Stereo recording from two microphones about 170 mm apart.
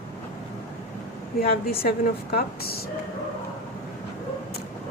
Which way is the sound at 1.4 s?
65° left (ahead or behind).